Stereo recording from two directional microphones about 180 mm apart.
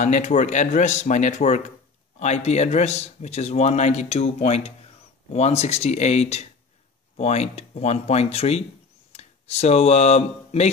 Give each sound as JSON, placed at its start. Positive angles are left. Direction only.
{"t": 0.0, "sound": "speech", "side_deg": 40}